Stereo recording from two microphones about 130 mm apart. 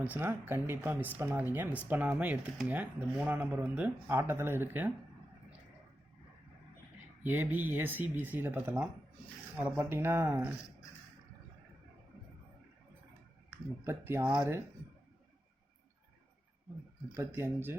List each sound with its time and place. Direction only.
0.0 s speech: 15° right (ahead or behind)
7.2 s speech: 15° right (ahead or behind)
13.8 s speech: 20° right (ahead or behind)
17.2 s speech: 20° right (ahead or behind)